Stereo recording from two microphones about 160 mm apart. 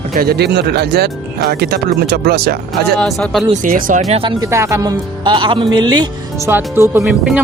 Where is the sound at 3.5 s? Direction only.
55° right (ahead or behind).